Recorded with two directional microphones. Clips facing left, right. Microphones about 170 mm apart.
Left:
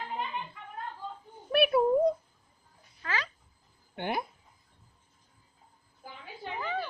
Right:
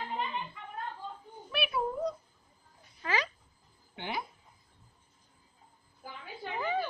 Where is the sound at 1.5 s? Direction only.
55° left (ahead or behind).